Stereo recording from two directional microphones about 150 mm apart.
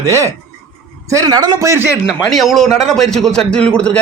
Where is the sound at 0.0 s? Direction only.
20° right (ahead or behind).